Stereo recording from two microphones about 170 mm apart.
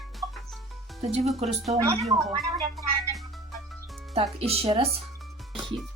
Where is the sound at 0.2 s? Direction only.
Centre (ahead or behind).